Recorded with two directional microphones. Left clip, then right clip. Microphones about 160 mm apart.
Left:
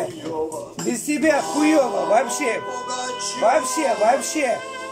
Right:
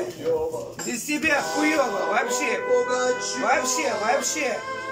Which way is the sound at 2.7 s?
20° left (ahead or behind).